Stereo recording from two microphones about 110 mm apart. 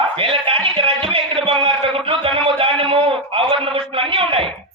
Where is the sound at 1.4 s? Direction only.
50° right (ahead or behind).